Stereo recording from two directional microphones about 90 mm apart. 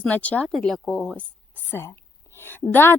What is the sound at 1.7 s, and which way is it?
A woman's voice, 30° left (ahead or behind).